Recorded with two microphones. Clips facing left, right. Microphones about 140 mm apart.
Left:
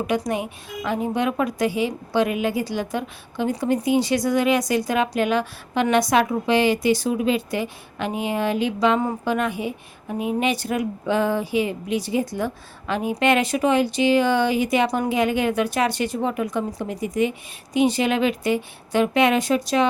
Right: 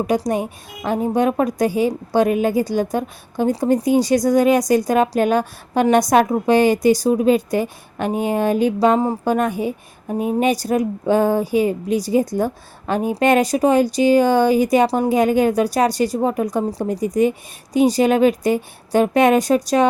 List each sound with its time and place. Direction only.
0.1 s a woman's voice: 40° right (ahead or behind)